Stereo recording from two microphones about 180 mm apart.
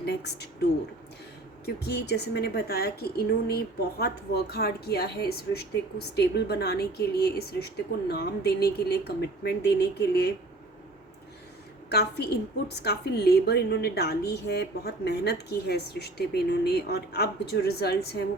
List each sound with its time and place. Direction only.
0.0 s a sound: 65° left (ahead or behind)
1.6 s a woman's voice: 65° left (ahead or behind)
12.6 s a woman's voice: 65° left (ahead or behind)